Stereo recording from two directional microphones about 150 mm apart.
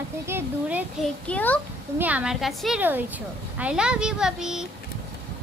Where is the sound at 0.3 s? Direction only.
10° right (ahead or behind).